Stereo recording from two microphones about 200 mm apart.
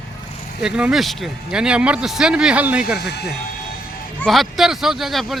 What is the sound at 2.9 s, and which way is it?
Speech, 55° left (ahead or behind).